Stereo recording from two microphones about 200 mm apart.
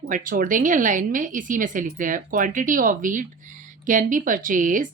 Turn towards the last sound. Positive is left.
turn(degrees=-40)  # may be behind; listen again after turning